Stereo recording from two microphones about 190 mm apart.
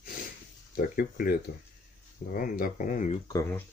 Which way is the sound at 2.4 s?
45° left (ahead or behind).